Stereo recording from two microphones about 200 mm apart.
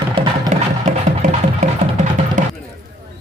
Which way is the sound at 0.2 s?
25° right (ahead or behind).